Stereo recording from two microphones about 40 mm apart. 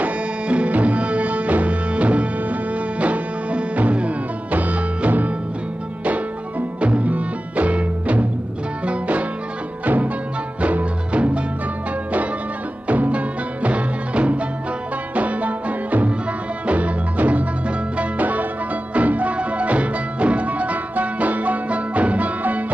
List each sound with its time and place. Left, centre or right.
0.0 s music: right
6.8 s music: right
12.8 s music: right